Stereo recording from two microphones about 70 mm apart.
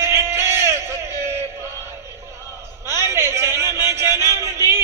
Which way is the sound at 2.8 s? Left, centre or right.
Right.